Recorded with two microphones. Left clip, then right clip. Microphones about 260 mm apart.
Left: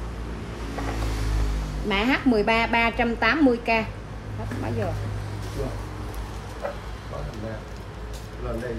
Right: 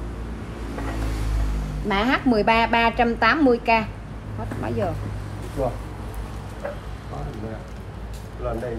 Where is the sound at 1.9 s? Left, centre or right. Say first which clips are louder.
Right 2 dB; centre.